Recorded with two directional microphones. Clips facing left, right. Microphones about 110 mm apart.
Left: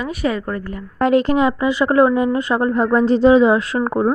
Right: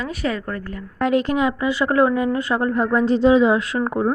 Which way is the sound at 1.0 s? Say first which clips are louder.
Left 4 dB; 35° left (ahead or behind).